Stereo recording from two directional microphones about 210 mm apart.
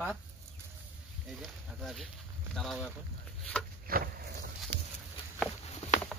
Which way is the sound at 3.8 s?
45° right (ahead or behind).